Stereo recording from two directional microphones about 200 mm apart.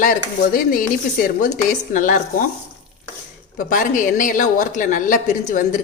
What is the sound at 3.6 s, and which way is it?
A woman's voice, 40° left (ahead or behind).